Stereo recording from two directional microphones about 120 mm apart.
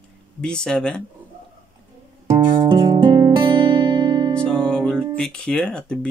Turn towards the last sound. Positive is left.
turn(degrees=5)  # may be behind; listen again after turning